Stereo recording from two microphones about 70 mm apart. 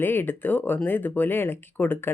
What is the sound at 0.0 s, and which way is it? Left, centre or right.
Speech, left.